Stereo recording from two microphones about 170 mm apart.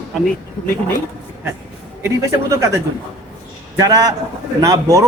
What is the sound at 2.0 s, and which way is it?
Speech, 20° right (ahead or behind).